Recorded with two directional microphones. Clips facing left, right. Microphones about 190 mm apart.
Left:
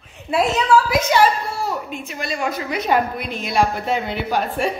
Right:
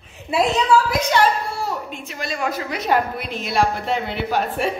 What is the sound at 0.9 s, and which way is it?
A woman's voice, 5° left (ahead or behind).